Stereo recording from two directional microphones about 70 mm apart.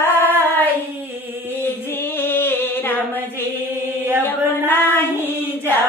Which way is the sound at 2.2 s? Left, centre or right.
Left.